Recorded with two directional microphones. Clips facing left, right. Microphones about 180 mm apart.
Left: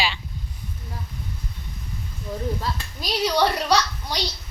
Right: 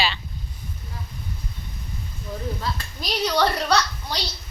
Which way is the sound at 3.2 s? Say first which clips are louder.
Left 1 dB; 10° left (ahead or behind).